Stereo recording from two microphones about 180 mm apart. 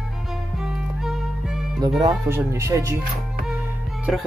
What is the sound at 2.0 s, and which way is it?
Speech, 15° right (ahead or behind).